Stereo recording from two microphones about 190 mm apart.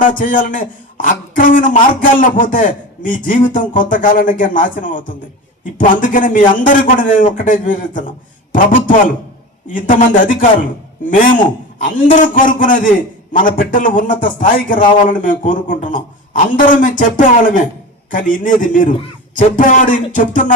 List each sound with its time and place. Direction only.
0.0 s speech: 45° left (ahead or behind)